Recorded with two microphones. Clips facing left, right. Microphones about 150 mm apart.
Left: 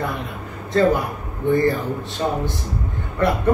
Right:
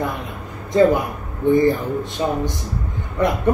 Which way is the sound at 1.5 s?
15° right (ahead or behind).